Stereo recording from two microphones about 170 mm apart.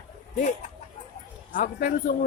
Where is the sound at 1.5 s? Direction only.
50° left (ahead or behind).